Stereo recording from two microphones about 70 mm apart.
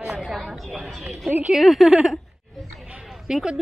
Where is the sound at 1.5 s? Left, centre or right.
Centre.